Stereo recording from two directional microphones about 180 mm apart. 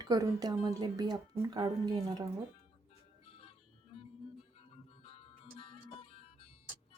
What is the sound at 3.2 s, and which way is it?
Music, 30° left (ahead or behind).